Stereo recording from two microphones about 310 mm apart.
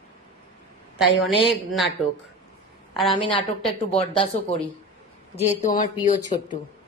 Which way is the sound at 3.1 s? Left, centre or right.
Centre.